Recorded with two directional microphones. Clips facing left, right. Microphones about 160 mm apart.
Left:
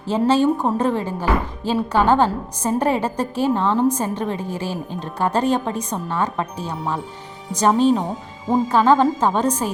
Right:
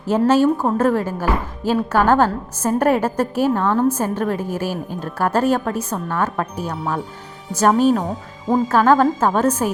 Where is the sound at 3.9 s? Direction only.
10° right (ahead or behind).